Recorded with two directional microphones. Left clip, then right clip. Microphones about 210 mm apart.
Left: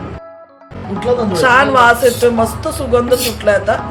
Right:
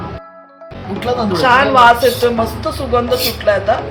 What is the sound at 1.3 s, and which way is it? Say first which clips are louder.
A woman's voice: even; 20° left (ahead or behind).